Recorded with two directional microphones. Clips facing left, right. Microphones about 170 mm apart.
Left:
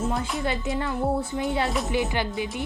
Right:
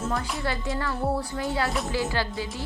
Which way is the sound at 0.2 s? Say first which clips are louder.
Left 2 dB; 20° left (ahead or behind).